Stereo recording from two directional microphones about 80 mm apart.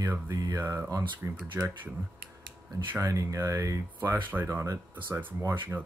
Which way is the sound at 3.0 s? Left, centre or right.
Right.